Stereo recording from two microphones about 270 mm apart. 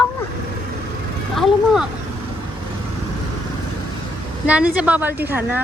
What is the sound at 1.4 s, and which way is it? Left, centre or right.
Speech, centre.